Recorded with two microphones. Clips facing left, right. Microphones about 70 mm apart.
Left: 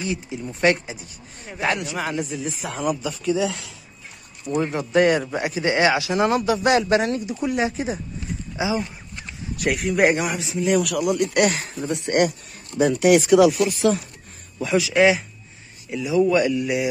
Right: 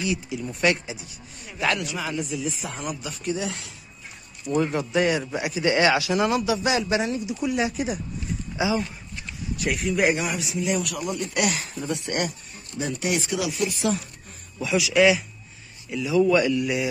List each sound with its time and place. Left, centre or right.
0.0 s speech: left
1.7 s a man's voice: left
2.0 s a man's voice: left
4.6 s a man's voice: left
4.9 s a man's voice: left
7.3 s a man's voice: left
9.6 s a man's voice: left
10.7 s speech: left
11.3 s a man's voice: left
11.8 s a man's voice: left
13.0 s speech: left
13.7 s a man's voice: left
14.9 s a man's voice: left